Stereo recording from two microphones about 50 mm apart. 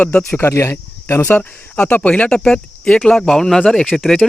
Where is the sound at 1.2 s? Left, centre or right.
Left.